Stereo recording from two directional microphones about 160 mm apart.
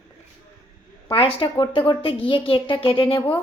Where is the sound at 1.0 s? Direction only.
35° left (ahead or behind).